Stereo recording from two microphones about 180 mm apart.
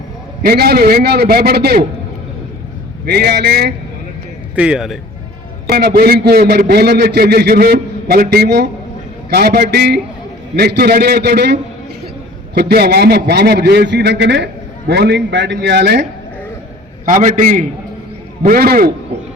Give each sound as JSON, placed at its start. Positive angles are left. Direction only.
{"t": 0.4, "sound": "a man's voice", "side_deg": -60}
{"t": 3.1, "sound": "a man's voice", "side_deg": -65}
{"t": 4.5, "sound": "speech", "side_deg": -5}
{"t": 5.6, "sound": "a man's voice", "side_deg": -65}
{"t": 17.1, "sound": "a man's voice", "side_deg": -45}
{"t": 18.4, "sound": "a man's voice", "side_deg": -55}